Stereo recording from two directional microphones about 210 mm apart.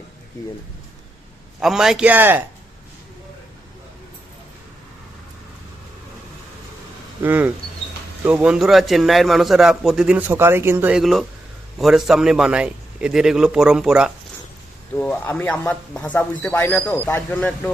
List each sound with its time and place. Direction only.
0.4 s a man's voice: 15° left (ahead or behind)
1.5 s a man's voice: centre (ahead or behind)
7.2 s a man's voice: 10° right (ahead or behind)
14.9 s a man's voice: 10° left (ahead or behind)